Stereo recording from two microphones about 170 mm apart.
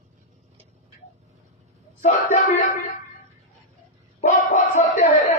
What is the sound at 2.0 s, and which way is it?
Speech, 45° left (ahead or behind).